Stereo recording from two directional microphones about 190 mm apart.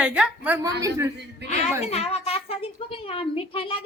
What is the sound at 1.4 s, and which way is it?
Speech, 60° right (ahead or behind).